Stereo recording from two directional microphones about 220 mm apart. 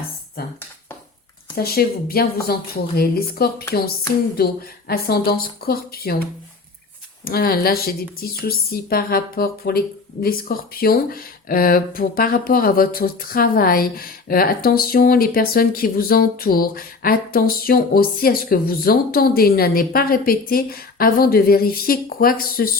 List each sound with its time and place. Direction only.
0.4 s a woman's voice: 45° left (ahead or behind)
1.5 s a woman's voice: 45° left (ahead or behind)
7.3 s a woman's voice: 45° left (ahead or behind)